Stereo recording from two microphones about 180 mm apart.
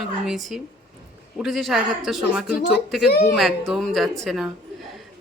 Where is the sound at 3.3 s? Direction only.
Centre (ahead or behind).